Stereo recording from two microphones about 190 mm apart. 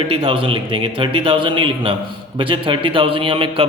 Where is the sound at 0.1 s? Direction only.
30° right (ahead or behind).